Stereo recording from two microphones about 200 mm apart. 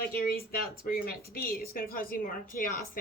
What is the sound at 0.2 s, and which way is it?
A woman's voice, 50° left (ahead or behind).